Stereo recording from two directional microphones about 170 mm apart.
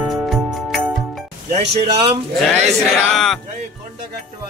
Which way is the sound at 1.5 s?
40° right (ahead or behind).